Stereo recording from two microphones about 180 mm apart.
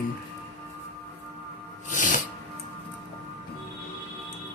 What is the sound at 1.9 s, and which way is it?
Music, 45° left (ahead or behind).